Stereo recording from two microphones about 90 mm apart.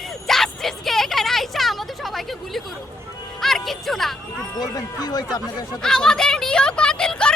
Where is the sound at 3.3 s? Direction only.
5° left (ahead or behind).